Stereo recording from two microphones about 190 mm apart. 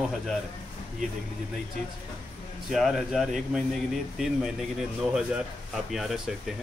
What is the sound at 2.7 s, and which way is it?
Speech, centre (ahead or behind).